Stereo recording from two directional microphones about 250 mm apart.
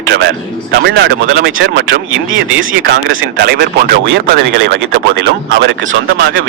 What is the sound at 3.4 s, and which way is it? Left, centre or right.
A man's voice, right.